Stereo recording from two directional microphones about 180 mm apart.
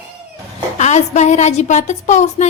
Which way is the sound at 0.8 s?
40° left (ahead or behind).